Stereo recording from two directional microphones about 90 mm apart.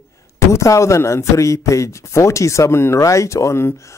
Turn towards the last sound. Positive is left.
turn(degrees=30)  # may be behind; listen again after turning